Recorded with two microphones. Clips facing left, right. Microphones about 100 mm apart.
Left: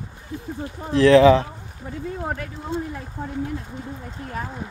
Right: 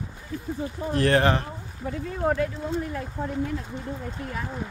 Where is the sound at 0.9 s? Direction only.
90° left.